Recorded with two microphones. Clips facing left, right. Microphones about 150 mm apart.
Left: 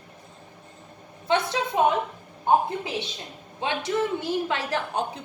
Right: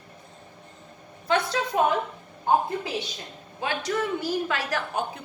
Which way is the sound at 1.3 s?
20° left (ahead or behind).